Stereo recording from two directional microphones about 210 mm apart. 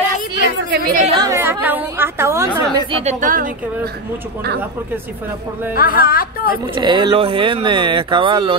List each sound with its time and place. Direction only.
0.7 s chatter: 45° right (ahead or behind)
1.0 s chatter: 20° right (ahead or behind)
2.9 s a woman's voice: 30° right (ahead or behind)
5.8 s speech: 45° left (ahead or behind)
6.6 s speech: 20° right (ahead or behind)